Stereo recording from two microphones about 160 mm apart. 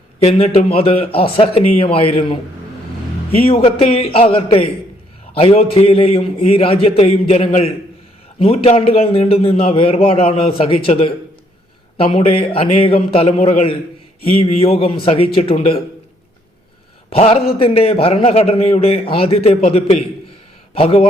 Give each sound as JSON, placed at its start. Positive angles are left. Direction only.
{"t": 0.2, "sound": "a man's voice", "side_deg": 40}
{"t": 17.1, "sound": "a man's voice", "side_deg": 40}